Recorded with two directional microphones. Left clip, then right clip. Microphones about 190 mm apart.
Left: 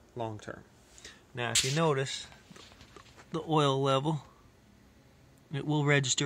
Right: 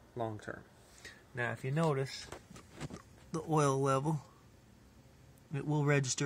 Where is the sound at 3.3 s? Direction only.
5° left (ahead or behind).